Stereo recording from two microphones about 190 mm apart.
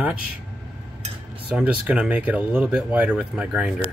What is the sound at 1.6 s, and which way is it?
Speech, 5° right (ahead or behind).